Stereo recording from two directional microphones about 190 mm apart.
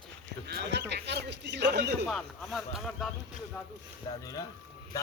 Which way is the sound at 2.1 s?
Centre (ahead or behind).